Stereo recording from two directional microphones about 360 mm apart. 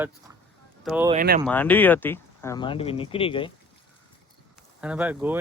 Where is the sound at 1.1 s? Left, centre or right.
Right.